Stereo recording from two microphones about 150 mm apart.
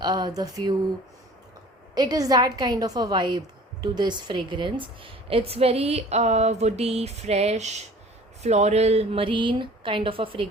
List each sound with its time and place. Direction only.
0.0 s a woman's voice: 25° right (ahead or behind)
2.0 s a woman's voice: 25° right (ahead or behind)